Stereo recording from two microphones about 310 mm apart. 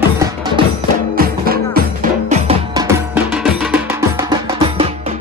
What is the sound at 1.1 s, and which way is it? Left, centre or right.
Music, right.